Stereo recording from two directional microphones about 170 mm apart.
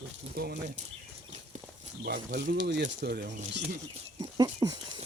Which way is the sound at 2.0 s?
65° right (ahead or behind).